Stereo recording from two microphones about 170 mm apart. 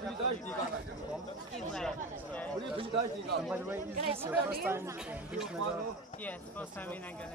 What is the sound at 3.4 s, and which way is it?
Speech, 10° right (ahead or behind).